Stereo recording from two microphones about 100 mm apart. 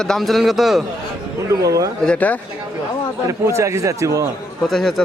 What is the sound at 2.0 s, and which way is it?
Speech, 15° left (ahead or behind).